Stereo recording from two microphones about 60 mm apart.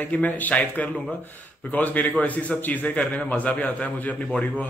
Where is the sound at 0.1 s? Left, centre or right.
Left.